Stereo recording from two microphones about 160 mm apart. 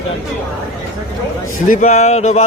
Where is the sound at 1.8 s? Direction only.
45° left (ahead or behind).